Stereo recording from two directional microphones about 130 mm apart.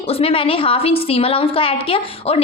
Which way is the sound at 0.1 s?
50° left (ahead or behind).